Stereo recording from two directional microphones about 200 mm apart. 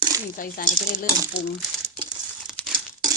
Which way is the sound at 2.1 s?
Centre (ahead or behind).